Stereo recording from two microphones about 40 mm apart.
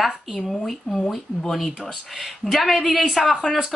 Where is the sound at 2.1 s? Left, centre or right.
Centre.